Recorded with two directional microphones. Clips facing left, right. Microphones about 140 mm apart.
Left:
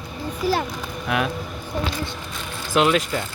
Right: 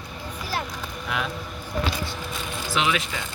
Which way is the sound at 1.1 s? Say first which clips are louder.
Left 6 dB; 60° left (ahead or behind).